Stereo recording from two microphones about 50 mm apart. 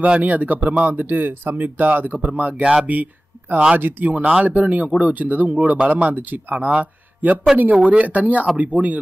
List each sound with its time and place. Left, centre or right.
0.0 s speech: right
6.8 s a sound: right
7.7 s speech: right